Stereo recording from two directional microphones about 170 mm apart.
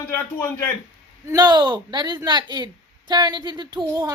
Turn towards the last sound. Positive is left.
turn(degrees=-25)  # may be behind; listen again after turning